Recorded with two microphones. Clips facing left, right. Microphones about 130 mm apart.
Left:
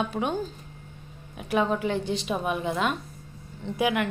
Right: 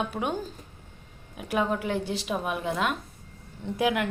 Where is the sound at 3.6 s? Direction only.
15° right (ahead or behind).